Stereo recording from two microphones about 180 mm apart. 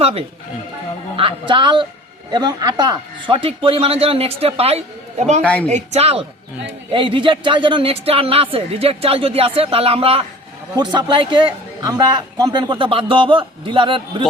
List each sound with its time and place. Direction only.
0.0 s a man's voice: 35° right (ahead or behind)
5.4 s a woman's voice: 5° left (ahead or behind)
5.6 s a man's voice: 40° right (ahead or behind)